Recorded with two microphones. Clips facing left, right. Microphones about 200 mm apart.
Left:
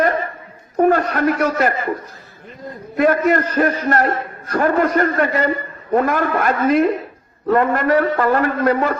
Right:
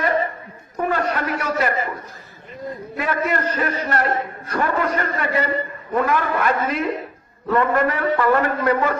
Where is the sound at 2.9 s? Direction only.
45° left (ahead or behind).